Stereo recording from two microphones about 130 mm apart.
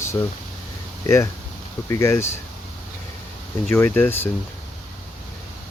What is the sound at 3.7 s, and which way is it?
Speech, 20° left (ahead or behind).